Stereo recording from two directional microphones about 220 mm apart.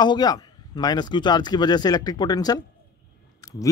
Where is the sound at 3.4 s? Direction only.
15° left (ahead or behind).